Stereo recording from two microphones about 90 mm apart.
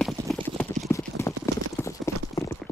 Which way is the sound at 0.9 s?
30° left (ahead or behind).